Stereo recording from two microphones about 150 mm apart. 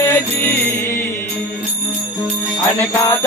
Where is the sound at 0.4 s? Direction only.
15° left (ahead or behind).